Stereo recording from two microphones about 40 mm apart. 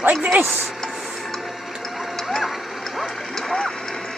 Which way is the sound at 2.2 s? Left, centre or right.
Centre.